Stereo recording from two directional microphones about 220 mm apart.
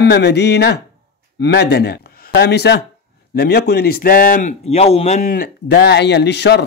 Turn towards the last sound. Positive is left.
turn(degrees=50)  # may be behind; listen again after turning